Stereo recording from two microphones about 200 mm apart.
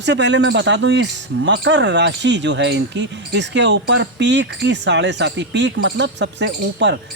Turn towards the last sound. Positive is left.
turn(degrees=-60)  # may be behind; listen again after turning